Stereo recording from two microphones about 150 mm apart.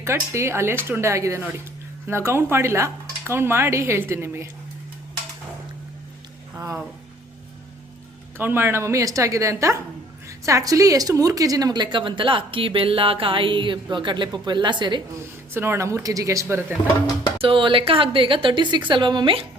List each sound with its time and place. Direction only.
0.0 s speech: 20° right (ahead or behind)
8.4 s a woman's voice: 15° right (ahead or behind); by 15.0 s 30° right (ahead or behind)
15.5 s speech: 15° right (ahead or behind)
16.8 s speech: 25° left (ahead or behind)
17.3 s a woman's voice: 35° right (ahead or behind)